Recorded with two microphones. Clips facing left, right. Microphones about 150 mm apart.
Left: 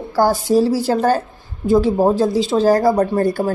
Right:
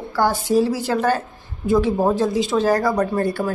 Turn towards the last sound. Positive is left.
turn(degrees=35)  # may be behind; listen again after turning